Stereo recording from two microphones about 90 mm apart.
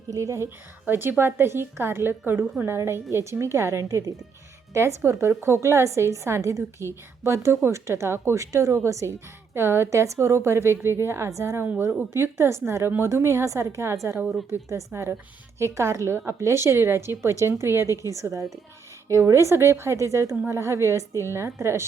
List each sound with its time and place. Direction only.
0.1 s a woman's voice: 35° right (ahead or behind)
0.9 s a woman's voice: 25° right (ahead or behind)
12.1 s a woman's voice: 30° right (ahead or behind)